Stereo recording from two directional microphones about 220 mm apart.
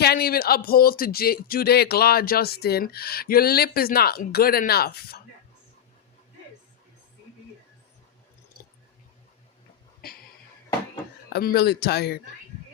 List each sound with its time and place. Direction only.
0.0 s speech: 45° left (ahead or behind)
11.3 s speech: 45° left (ahead or behind)